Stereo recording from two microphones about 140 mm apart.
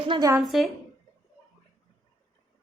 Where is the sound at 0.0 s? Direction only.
35° right (ahead or behind).